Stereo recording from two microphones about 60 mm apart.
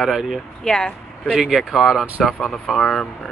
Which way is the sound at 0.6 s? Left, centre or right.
Centre.